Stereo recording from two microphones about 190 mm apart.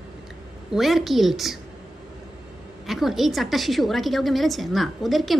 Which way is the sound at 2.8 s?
Centre (ahead or behind).